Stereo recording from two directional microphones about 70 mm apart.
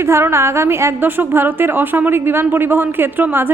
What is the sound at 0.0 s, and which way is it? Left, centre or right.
A woman's voice, right.